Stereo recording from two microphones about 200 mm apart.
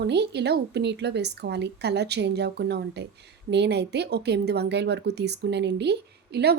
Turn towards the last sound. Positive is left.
turn(degrees=-55)  # may be behind; listen again after turning